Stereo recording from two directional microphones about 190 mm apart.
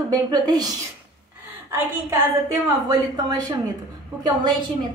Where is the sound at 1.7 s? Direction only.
10° right (ahead or behind).